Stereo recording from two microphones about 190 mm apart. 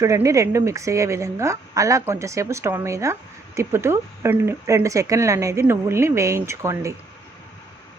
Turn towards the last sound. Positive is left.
turn(degrees=-15)  # may be behind; listen again after turning